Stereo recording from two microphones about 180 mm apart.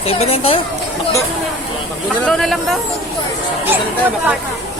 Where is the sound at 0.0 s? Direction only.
35° left (ahead or behind).